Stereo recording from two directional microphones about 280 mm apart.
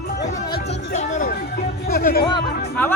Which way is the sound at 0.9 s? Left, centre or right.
Left.